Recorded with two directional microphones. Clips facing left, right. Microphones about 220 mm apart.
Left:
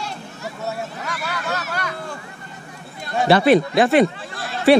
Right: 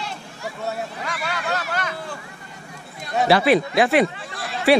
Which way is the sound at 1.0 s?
Centre (ahead or behind).